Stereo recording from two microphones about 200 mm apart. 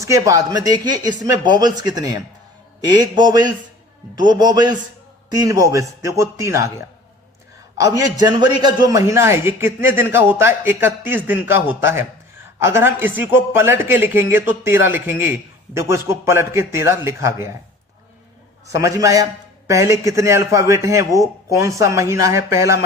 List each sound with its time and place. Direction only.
0.0 s a man's voice: 15° right (ahead or behind)
7.9 s a man's voice: 20° right (ahead or behind)
18.7 s a man's voice: 15° right (ahead or behind)